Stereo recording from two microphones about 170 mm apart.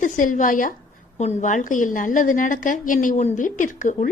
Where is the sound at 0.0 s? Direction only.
50° left (ahead or behind).